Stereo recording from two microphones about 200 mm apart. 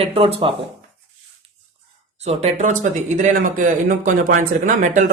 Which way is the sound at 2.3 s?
35° right (ahead or behind).